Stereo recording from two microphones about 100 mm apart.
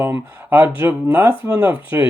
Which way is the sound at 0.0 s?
20° right (ahead or behind).